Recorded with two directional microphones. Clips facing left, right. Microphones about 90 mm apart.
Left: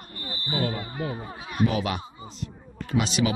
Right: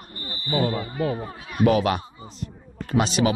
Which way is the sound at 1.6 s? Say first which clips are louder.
Right 6 dB; 55° right (ahead or behind).